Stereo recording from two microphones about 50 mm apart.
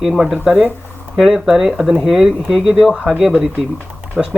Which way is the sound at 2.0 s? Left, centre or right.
Centre.